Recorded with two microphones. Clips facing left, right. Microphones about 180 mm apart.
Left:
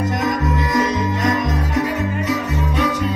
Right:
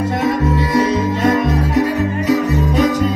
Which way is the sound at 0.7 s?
30° right (ahead or behind).